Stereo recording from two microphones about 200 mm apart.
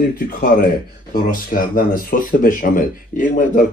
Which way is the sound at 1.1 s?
45° left (ahead or behind).